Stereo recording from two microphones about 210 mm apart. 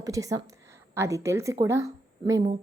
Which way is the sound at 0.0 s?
15° right (ahead or behind).